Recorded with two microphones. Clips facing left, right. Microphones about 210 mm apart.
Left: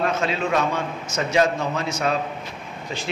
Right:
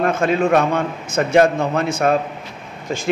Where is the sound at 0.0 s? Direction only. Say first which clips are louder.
Right 6 dB; 50° right (ahead or behind).